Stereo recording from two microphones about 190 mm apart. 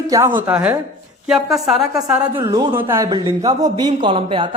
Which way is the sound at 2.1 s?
20° right (ahead or behind).